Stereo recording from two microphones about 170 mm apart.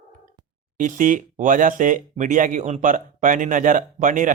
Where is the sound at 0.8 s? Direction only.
50° right (ahead or behind).